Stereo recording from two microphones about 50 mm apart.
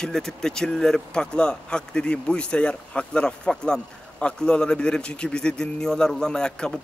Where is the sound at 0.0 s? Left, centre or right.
Centre.